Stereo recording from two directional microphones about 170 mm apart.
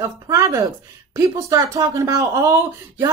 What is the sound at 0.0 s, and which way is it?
A woman's voice, 20° right (ahead or behind).